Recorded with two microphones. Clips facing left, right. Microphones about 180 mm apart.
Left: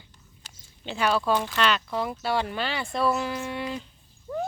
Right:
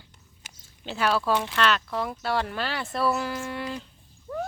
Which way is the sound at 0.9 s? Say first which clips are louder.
Even; 5° right (ahead or behind).